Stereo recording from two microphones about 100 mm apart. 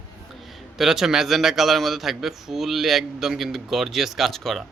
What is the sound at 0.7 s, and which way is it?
A man's voice, 5° right (ahead or behind).